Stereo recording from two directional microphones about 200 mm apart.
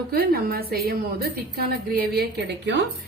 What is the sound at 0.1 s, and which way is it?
A woman's voice, 50° right (ahead or behind).